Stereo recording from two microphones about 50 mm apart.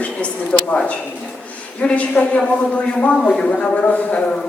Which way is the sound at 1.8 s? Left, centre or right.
Left.